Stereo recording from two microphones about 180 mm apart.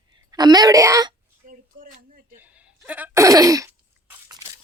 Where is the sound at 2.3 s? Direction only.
10° right (ahead or behind).